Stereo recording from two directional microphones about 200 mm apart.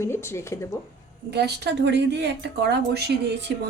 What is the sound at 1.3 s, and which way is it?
Speech, 55° right (ahead or behind).